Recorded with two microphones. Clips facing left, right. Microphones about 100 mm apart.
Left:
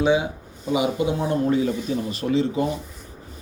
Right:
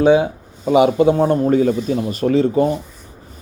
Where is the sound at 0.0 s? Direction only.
45° right (ahead or behind).